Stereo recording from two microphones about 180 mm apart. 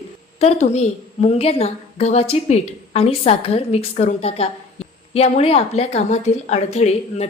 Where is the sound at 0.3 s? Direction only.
35° left (ahead or behind).